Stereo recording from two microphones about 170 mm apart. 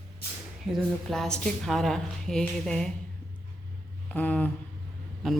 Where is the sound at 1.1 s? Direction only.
Centre (ahead or behind).